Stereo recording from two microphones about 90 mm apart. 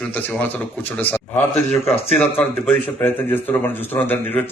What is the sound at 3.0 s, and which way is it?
Speech, 25° left (ahead or behind).